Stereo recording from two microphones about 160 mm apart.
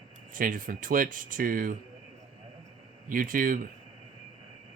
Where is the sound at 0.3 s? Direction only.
60° right (ahead or behind).